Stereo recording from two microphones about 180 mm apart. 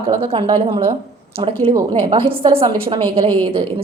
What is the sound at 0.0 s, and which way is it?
A woman's voice, 30° right (ahead or behind).